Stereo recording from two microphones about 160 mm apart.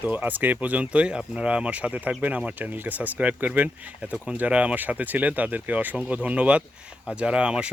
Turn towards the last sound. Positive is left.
turn(degrees=-5)  # may be behind; listen again after turning